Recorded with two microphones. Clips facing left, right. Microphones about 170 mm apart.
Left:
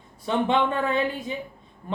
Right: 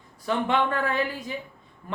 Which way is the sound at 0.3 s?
20° left (ahead or behind).